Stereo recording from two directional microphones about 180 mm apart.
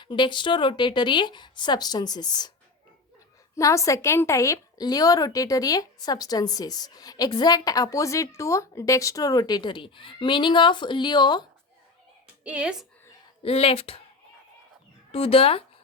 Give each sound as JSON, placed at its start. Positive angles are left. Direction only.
{"t": 0.0, "sound": "a woman's voice", "side_deg": 25}
{"t": 3.5, "sound": "a woman's voice", "side_deg": 15}
{"t": 12.5, "sound": "a woman's voice", "side_deg": -5}
{"t": 13.4, "sound": "speech", "side_deg": 30}
{"t": 15.1, "sound": "speech", "side_deg": 30}